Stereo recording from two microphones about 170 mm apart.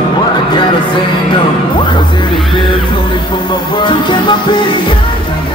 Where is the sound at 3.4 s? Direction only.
30° left (ahead or behind).